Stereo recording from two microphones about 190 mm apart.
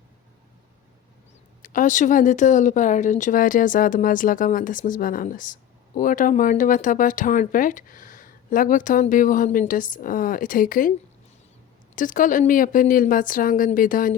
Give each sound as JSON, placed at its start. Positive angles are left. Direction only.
{"t": 1.6, "sound": "speech", "side_deg": 45}
{"t": 11.9, "sound": "speech", "side_deg": 45}